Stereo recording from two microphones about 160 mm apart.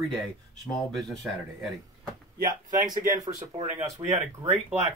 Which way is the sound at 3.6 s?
40° right (ahead or behind).